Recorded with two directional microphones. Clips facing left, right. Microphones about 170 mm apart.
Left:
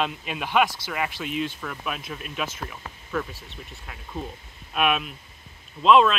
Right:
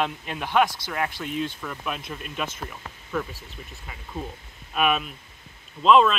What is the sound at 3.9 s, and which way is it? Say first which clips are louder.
Speech: even; centre (ahead or behind).